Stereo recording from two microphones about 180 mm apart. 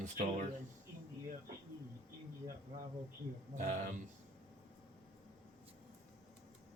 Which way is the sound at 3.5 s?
40° right (ahead or behind).